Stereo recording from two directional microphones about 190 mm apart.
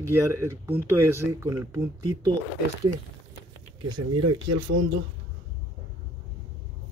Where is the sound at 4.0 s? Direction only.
25° right (ahead or behind).